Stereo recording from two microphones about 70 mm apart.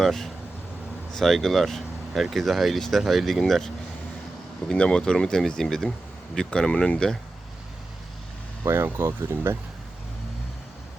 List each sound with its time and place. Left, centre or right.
0.0 s speech: centre
4.7 s speech: centre
8.6 s speech: right